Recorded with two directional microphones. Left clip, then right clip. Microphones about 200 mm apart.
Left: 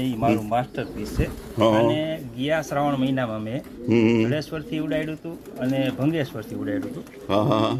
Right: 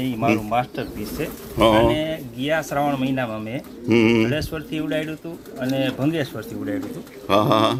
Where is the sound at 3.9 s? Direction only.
Centre (ahead or behind).